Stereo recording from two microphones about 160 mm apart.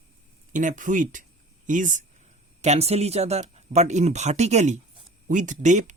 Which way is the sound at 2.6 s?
40° right (ahead or behind).